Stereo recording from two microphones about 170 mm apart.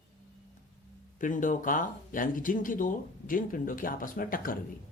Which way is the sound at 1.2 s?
50° left (ahead or behind).